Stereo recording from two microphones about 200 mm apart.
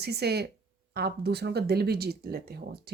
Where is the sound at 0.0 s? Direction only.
55° right (ahead or behind).